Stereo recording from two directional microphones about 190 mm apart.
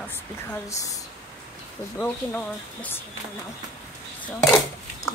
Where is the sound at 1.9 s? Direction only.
5° left (ahead or behind).